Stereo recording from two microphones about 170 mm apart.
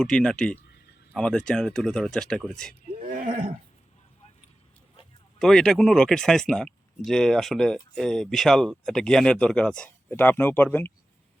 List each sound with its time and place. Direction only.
0.0 s speech: 5° left (ahead or behind)
3.1 s a sound: 55° right (ahead or behind)
5.4 s speech: 5° left (ahead or behind)